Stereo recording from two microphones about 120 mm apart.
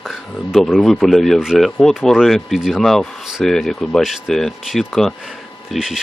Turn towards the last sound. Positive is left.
turn(degrees=-5)  # may be behind; listen again after turning